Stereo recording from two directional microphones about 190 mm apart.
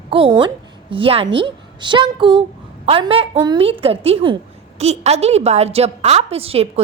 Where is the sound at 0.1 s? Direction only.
25° right (ahead or behind).